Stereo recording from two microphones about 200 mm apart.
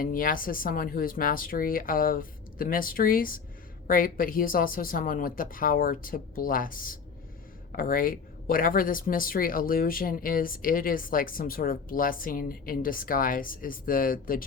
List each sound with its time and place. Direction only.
0.0 s speech: 45° left (ahead or behind)